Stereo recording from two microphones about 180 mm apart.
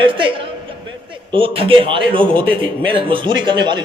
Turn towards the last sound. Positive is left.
turn(degrees=-25)  # may be behind; listen again after turning